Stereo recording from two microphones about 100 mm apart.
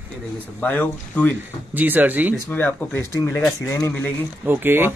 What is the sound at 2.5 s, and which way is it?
Speech, 20° left (ahead or behind).